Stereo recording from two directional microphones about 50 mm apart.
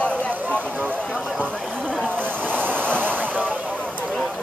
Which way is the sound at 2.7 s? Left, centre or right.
Left.